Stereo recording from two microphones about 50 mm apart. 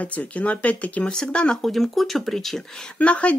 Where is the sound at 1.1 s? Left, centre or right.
Centre.